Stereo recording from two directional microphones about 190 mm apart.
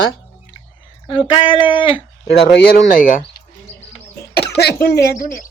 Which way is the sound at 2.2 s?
60° left (ahead or behind).